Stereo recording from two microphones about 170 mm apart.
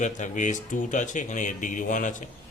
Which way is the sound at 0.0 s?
45° left (ahead or behind).